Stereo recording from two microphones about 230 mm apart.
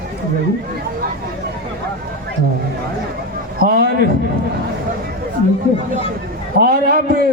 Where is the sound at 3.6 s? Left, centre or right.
Right.